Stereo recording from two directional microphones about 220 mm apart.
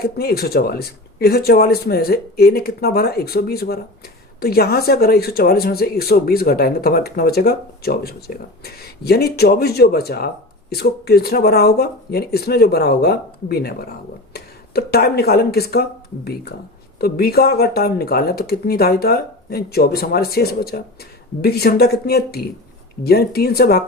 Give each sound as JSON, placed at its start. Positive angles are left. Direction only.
{"t": 0.0, "sound": "speech", "side_deg": 45}